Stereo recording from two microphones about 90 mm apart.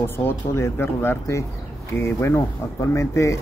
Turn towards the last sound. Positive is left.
turn(degrees=35)  # may be behind; listen again after turning